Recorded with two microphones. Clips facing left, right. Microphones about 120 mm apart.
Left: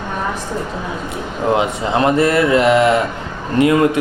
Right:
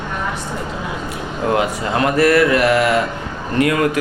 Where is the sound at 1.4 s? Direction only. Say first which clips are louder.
Left 1 dB; 20° left (ahead or behind).